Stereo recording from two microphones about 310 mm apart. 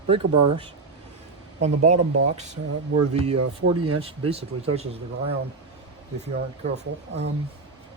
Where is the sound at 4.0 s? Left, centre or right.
Centre.